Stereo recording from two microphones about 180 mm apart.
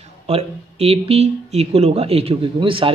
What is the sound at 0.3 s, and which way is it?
Speech, 35° right (ahead or behind).